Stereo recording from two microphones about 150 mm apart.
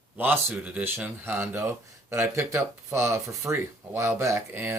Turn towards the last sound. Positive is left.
turn(degrees=-15)  # may be behind; listen again after turning